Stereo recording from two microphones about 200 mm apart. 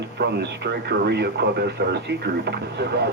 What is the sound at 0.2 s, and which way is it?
Speech, 55° right (ahead or behind).